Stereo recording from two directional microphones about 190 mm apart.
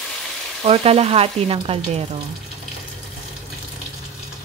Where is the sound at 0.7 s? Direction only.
30° right (ahead or behind).